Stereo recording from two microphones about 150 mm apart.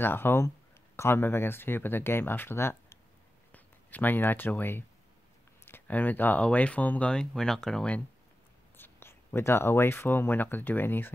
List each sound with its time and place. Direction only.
0.0 s speech: 15° left (ahead or behind)